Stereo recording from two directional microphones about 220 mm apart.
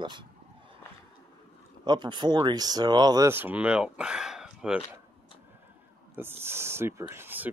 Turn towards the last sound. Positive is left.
turn(degrees=-10)  # may be behind; listen again after turning